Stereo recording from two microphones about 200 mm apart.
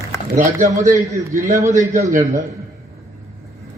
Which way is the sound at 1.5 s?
15° right (ahead or behind).